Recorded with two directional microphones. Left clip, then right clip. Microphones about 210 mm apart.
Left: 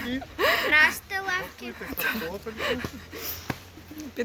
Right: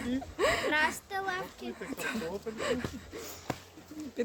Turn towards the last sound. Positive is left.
turn(degrees=0)  # may be behind; listen again after turning